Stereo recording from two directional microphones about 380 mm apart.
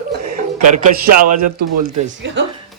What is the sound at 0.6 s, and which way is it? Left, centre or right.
A man's voice, right.